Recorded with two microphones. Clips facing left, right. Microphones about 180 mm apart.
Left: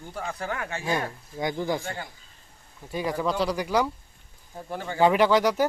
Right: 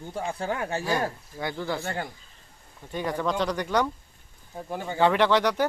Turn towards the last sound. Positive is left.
turn(degrees=10)  # may be behind; listen again after turning